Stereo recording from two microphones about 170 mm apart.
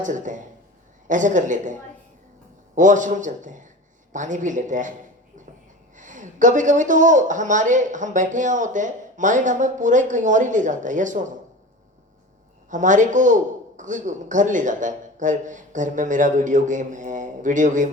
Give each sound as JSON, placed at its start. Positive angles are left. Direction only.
{"t": 0.0, "sound": "a woman's voice", "side_deg": -50}
{"t": 2.7, "sound": "a woman's voice", "side_deg": -50}
{"t": 6.0, "sound": "a woman's voice", "side_deg": -45}
{"t": 12.7, "sound": "a woman's voice", "side_deg": -45}